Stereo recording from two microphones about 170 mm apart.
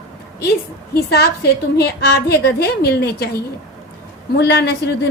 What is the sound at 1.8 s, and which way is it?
A woman's voice, 70° left (ahead or behind).